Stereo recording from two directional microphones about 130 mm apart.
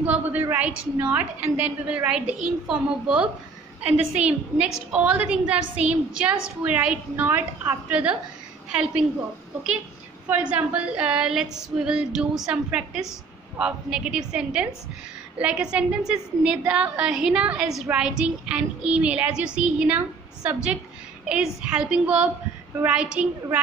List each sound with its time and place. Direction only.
0.0 s a woman's voice: 10° right (ahead or behind)
10.2 s a woman's voice: 10° right (ahead or behind)